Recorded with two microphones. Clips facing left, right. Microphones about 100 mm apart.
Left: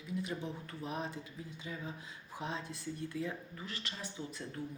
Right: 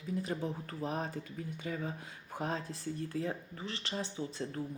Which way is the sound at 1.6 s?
60° right (ahead or behind).